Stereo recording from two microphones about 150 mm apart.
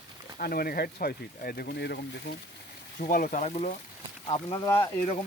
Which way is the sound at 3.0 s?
70° left (ahead or behind).